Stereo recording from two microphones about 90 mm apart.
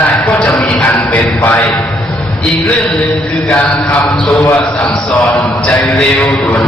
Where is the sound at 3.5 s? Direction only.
15° left (ahead or behind).